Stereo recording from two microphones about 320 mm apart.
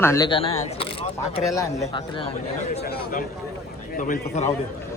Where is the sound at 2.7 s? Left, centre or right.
Left.